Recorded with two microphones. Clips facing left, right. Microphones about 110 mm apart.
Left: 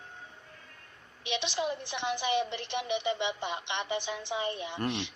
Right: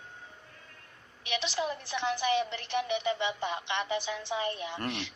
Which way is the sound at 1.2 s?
20° left (ahead or behind).